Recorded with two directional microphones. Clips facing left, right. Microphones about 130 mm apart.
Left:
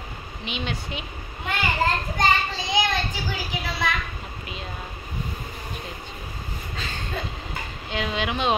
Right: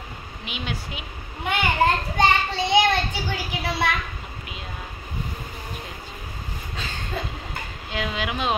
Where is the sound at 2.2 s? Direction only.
65° right (ahead or behind).